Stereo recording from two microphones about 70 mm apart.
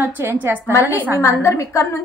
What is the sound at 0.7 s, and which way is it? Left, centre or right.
A woman's voice, left.